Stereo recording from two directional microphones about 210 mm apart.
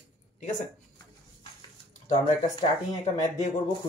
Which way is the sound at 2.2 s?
30° left (ahead or behind).